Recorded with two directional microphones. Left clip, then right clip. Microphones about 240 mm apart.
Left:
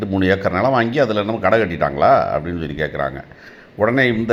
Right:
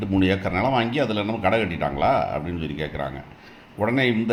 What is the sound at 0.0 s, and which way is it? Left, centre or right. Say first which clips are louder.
Speech: left 5 dB; centre.